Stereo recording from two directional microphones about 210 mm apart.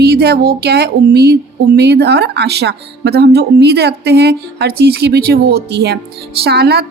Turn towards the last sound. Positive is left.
turn(degrees=-50)  # may be behind; listen again after turning